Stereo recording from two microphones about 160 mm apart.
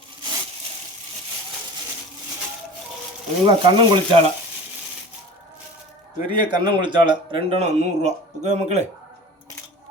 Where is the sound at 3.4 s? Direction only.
30° right (ahead or behind).